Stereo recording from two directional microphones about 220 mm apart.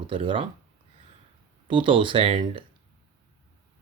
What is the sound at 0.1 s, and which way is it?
Speech, 25° right (ahead or behind).